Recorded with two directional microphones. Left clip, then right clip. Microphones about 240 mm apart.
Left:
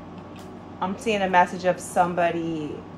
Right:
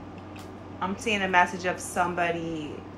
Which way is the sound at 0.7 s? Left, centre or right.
Left.